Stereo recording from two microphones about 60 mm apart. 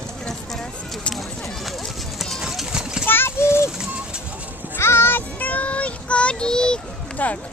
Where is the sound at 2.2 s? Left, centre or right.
Centre.